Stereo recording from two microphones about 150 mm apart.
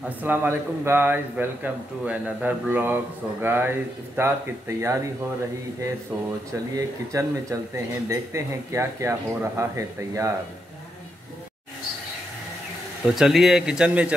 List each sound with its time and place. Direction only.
0.0 s a man's voice: 10° right (ahead or behind)
7.1 s speech: 20° right (ahead or behind)
13.0 s speech: centre (ahead or behind)